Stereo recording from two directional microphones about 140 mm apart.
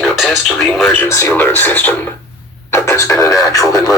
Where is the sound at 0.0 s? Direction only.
Centre (ahead or behind).